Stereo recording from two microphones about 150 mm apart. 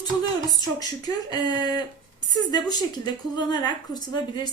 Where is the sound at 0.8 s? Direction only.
25° left (ahead or behind).